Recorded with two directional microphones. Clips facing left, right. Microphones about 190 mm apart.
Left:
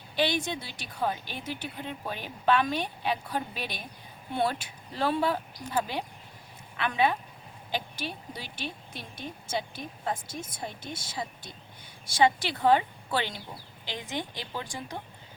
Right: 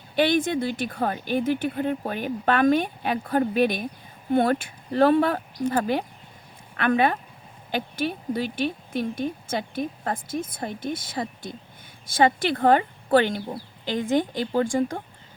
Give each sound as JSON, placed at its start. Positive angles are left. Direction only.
{"t": 0.2, "sound": "speech", "side_deg": -50}
{"t": 6.7, "sound": "speech", "side_deg": -55}